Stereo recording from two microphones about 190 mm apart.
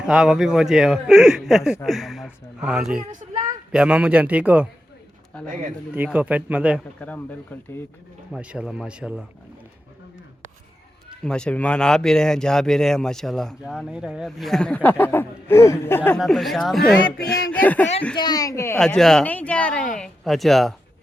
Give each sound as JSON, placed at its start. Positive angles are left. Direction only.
{"t": 0.0, "sound": "a man's voice", "side_deg": -5}
{"t": 5.9, "sound": "a man's voice", "side_deg": -10}
{"t": 7.0, "sound": "speech", "side_deg": 10}
{"t": 8.3, "sound": "speech", "side_deg": -5}
{"t": 11.2, "sound": "speech", "side_deg": 5}
{"t": 16.2, "sound": "speech", "side_deg": 0}
{"t": 18.2, "sound": "speech", "side_deg": 20}
{"t": 18.8, "sound": "speech", "side_deg": 5}